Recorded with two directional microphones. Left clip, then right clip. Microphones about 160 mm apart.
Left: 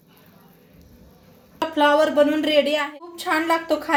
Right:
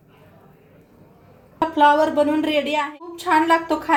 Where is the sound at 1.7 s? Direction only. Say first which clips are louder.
Right 1 dB; 50° left (ahead or behind).